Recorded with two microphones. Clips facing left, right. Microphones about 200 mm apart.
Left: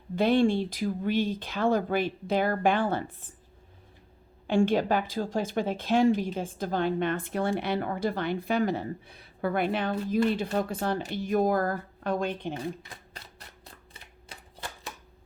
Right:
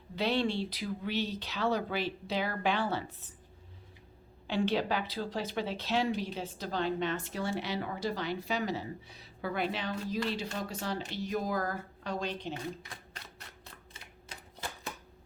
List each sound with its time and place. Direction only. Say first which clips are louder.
0.2 s speech: left 8 dB; 50° left (ahead or behind)
4.4 s speech: left 6 dB; 50° left (ahead or behind)